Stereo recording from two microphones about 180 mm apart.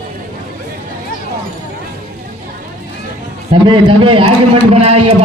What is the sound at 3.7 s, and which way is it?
A man's voice, 30° right (ahead or behind).